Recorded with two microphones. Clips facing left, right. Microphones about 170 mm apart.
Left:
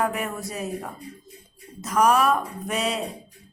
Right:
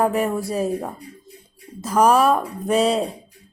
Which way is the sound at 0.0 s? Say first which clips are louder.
Right 7 dB; 30° right (ahead or behind).